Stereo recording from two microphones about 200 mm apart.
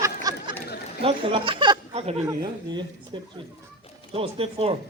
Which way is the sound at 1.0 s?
25° right (ahead or behind).